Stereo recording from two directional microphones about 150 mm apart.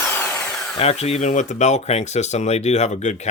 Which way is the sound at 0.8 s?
45° left (ahead or behind).